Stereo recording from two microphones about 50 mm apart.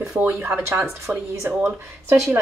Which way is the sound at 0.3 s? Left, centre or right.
Right.